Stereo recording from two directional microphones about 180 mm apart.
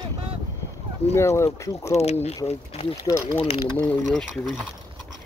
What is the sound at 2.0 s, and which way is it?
Speech, 35° left (ahead or behind).